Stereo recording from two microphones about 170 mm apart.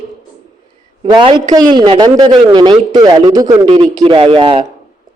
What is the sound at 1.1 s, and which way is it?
Speech, 30° right (ahead or behind).